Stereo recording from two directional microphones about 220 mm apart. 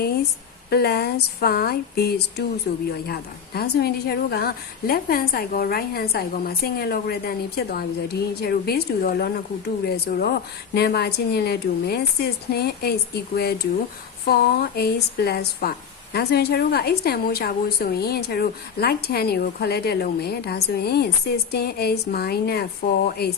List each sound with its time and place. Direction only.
0.7 s a woman's voice: 45° left (ahead or behind)